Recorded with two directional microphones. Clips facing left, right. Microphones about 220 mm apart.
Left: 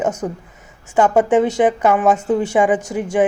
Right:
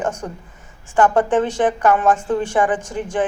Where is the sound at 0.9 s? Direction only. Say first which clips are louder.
Left 2 dB; 10° left (ahead or behind).